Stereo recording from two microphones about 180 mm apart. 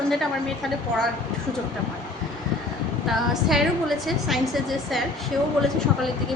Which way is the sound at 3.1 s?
Centre (ahead or behind).